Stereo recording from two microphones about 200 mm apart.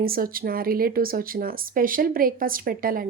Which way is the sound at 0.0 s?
45° right (ahead or behind).